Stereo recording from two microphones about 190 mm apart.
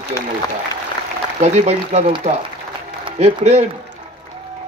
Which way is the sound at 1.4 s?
35° right (ahead or behind).